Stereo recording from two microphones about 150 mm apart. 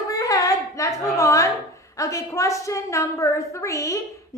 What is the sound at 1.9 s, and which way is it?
Child singing, 20° left (ahead or behind).